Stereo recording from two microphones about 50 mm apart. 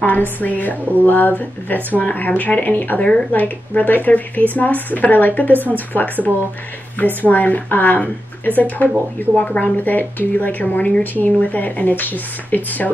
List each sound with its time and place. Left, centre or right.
0.0 s a woman's voice: left
3.0 s speech: centre
3.3 s a woman's voice: left